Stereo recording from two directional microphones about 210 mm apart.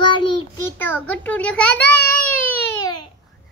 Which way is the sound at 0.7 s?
10° left (ahead or behind).